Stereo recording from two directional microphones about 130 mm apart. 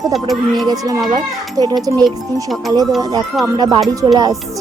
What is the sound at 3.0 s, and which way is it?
Speech, 30° right (ahead or behind).